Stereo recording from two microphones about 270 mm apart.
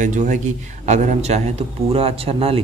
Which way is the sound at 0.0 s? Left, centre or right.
Right.